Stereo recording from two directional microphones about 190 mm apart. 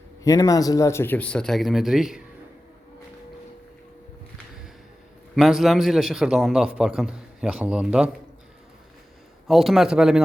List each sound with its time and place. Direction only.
0.3 s speech: 20° left (ahead or behind); by 2.2 s centre (ahead or behind)
5.3 s a man's voice: centre (ahead or behind)
9.5 s a man's voice: centre (ahead or behind)